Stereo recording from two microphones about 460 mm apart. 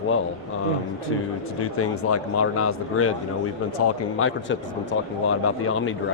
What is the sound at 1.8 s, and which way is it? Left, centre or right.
Speech, left.